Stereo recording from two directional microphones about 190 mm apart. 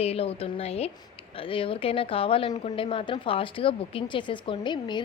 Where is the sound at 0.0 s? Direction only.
30° left (ahead or behind).